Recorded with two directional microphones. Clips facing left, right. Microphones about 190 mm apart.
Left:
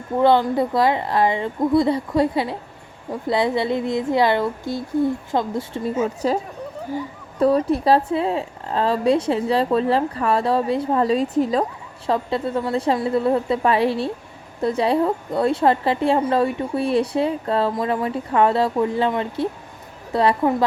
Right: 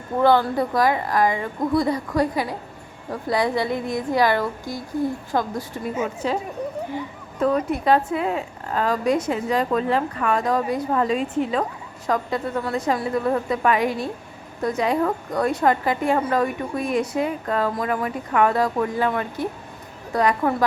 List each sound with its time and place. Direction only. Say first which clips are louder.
0.2 s a woman's voice: left 1 dB; 20° left (ahead or behind)